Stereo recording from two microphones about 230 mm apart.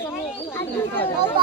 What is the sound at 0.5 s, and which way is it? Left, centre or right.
Chatter, centre.